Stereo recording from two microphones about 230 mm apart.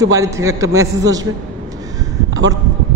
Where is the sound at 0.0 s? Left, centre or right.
Centre.